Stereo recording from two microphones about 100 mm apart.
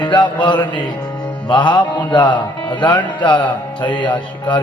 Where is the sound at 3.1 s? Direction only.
50° left (ahead or behind).